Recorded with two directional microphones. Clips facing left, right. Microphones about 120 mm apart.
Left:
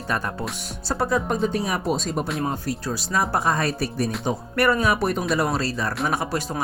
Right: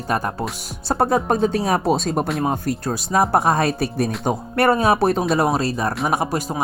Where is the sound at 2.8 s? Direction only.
50° right (ahead or behind).